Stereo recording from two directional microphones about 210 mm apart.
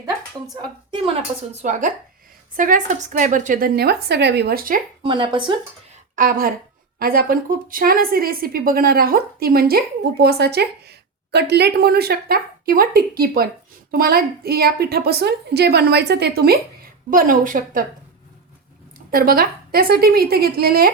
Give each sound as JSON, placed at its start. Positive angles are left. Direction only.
{"t": 0.5, "sound": "a woman's voice", "side_deg": -20}
{"t": 1.5, "sound": "a woman's voice", "side_deg": -35}
{"t": 5.0, "sound": "a woman's voice", "side_deg": -25}
{"t": 6.1, "sound": "a woman's voice", "side_deg": -40}
{"t": 19.1, "sound": "a woman's voice", "side_deg": -45}